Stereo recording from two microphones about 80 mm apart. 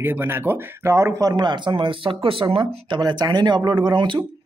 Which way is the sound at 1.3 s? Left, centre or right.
Right.